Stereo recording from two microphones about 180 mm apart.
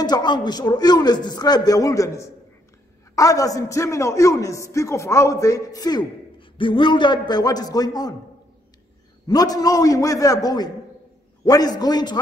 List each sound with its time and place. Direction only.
0.0 s a man's voice: 25° left (ahead or behind)
9.3 s a man's voice: 20° left (ahead or behind)